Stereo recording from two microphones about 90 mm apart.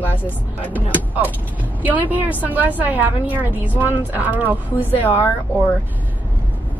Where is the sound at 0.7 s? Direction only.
20° right (ahead or behind).